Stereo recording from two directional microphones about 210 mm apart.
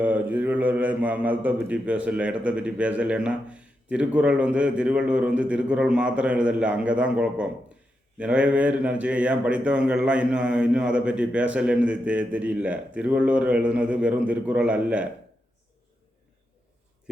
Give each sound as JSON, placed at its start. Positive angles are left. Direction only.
{"t": 0.0, "sound": "a man's voice", "side_deg": -10}